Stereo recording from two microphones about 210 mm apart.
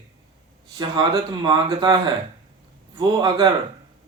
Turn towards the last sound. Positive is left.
turn(degrees=-20)  # may be behind; listen again after turning